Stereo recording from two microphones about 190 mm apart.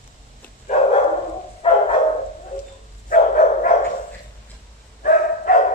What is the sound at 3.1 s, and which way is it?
Dog, 45° left (ahead or behind).